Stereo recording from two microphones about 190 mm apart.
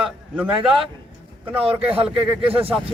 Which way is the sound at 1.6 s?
30° right (ahead or behind).